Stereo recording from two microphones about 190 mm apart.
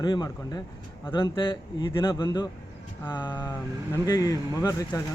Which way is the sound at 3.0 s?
10° left (ahead or behind).